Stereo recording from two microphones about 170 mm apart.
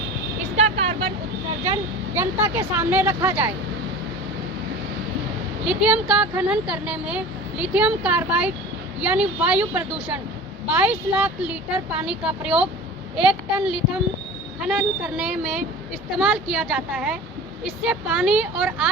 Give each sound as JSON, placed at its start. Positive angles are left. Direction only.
{"t": 0.5, "sound": "vehicle", "side_deg": -35}
{"t": 1.6, "sound": "speech", "side_deg": -20}
{"t": 5.6, "sound": "speech", "side_deg": -5}